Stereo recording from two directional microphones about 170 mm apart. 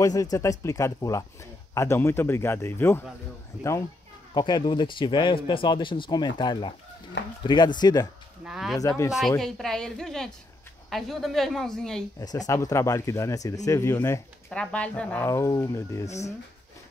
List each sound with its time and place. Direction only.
0.0 s speech: 20° left (ahead or behind)
4.3 s speech: 25° left (ahead or behind)
8.5 s speech: centre (ahead or behind)
8.7 s speech: 20° left (ahead or behind)
9.4 s speech: centre (ahead or behind)
12.2 s speech: 20° left (ahead or behind)
15.2 s speech: 20° left (ahead or behind)